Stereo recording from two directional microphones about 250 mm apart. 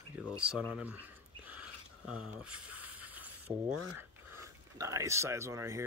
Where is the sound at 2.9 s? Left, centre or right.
Centre.